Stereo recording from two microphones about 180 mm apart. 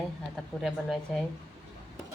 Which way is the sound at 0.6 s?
Centre (ahead or behind).